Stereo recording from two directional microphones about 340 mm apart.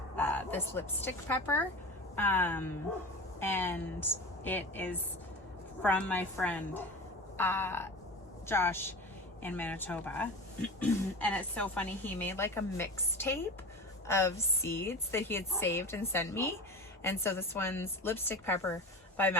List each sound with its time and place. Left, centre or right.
0.2 s a woman's voice: centre